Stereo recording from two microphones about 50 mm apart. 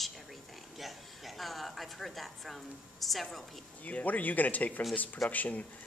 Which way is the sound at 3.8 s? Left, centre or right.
Left.